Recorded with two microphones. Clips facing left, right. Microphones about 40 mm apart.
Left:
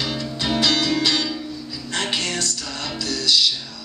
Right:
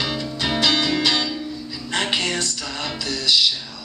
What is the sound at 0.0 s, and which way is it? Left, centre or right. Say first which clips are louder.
Music: right 1 dB; centre.